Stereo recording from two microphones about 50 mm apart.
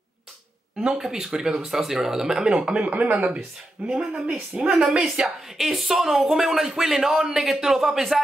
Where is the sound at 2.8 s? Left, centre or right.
Right.